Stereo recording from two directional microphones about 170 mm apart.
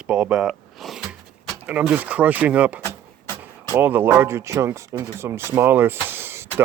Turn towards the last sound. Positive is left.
turn(degrees=-15)  # may be behind; listen again after turning